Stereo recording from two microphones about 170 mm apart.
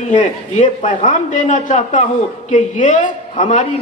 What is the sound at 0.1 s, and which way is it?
A man's voice, 45° left (ahead or behind).